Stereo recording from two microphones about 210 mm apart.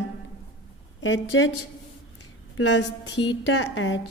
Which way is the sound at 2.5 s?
60° left (ahead or behind).